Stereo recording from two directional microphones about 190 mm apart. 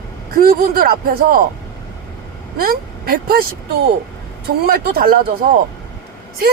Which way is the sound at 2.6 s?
50° right (ahead or behind).